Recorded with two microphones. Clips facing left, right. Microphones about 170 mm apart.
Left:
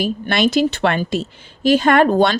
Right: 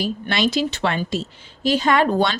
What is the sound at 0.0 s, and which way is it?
Speech, 50° left (ahead or behind).